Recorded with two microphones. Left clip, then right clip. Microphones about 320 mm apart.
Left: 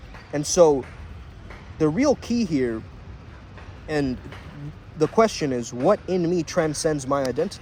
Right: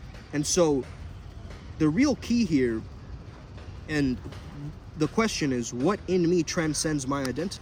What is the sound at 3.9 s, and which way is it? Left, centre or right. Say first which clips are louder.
Speech: left 3 dB; centre.